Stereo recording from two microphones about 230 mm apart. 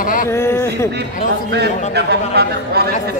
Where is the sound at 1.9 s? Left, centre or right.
Right.